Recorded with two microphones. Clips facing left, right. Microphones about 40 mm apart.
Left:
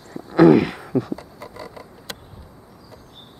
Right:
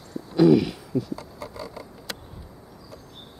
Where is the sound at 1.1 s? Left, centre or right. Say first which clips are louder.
Left 3 dB; left.